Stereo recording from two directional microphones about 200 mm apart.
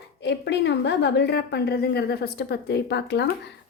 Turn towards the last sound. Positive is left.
turn(degrees=55)  # may be behind; listen again after turning